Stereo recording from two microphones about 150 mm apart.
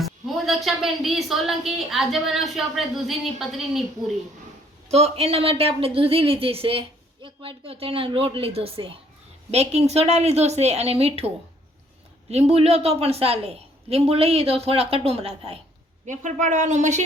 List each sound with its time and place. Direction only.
0.0 s speech: centre (ahead or behind)
4.9 s a woman's voice: 45° right (ahead or behind)
12.3 s a woman's voice: 45° right (ahead or behind)
16.0 s a woman's voice: 55° right (ahead or behind)